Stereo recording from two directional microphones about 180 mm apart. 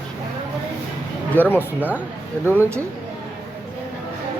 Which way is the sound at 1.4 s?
10° left (ahead or behind).